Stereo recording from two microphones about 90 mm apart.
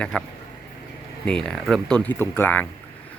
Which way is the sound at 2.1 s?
25° left (ahead or behind).